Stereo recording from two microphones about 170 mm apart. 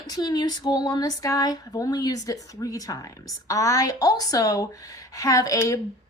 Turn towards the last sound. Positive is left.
turn(degrees=20)  # may be behind; listen again after turning